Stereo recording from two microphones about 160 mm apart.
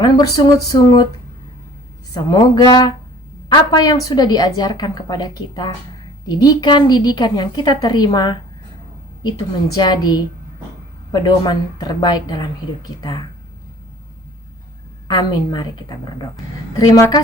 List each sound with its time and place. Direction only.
0.0 s a woman's voice: 25° left (ahead or behind)
2.1 s a woman's voice: 25° left (ahead or behind)
9.7 s a woman's voice: 25° left (ahead or behind)
15.0 s a woman's voice: 25° left (ahead or behind)